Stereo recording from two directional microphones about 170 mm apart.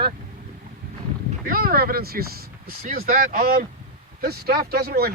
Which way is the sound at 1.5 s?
60° right (ahead or behind).